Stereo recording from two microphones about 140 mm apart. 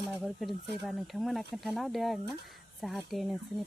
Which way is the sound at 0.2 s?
Centre (ahead or behind).